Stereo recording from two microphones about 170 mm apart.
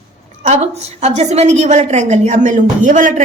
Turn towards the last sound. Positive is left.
turn(degrees=-50)  # may be behind; listen again after turning